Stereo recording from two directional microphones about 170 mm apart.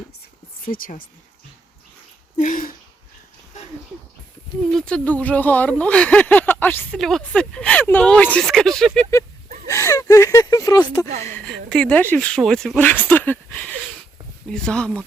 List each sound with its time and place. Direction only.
0.7 s speech: 55° left (ahead or behind)
2.4 s throat clearing: 50° left (ahead or behind)
4.7 s speech: 5° left (ahead or behind)
9.6 s gasp: 15° left (ahead or behind)
11.2 s speech: 15° left (ahead or behind)